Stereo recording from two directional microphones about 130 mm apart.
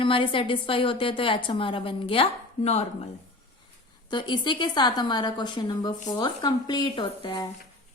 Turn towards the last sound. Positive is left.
turn(degrees=35)  # may be behind; listen again after turning